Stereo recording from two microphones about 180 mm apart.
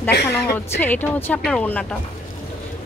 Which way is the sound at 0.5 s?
10° left (ahead or behind).